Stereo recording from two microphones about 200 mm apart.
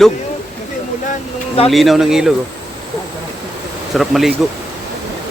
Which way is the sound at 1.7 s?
Centre (ahead or behind).